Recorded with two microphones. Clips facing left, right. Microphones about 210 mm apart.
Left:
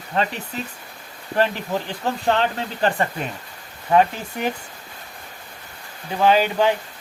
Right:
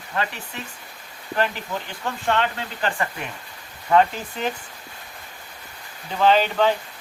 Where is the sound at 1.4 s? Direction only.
35° left (ahead or behind).